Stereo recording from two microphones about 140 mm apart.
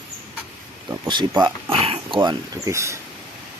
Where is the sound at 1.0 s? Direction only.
30° right (ahead or behind).